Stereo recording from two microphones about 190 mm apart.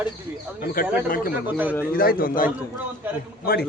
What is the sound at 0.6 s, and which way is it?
A man's voice, 50° left (ahead or behind).